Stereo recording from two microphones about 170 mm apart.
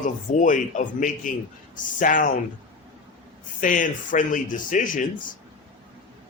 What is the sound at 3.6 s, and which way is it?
Speech, 50° left (ahead or behind).